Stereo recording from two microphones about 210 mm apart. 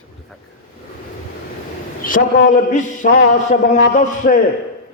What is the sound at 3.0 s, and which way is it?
A man's voice, 40° left (ahead or behind).